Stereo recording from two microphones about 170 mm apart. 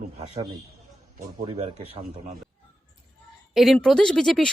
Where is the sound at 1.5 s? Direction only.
40° right (ahead or behind).